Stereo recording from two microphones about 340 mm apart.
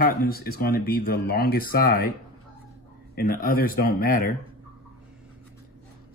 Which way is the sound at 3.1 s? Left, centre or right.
Left.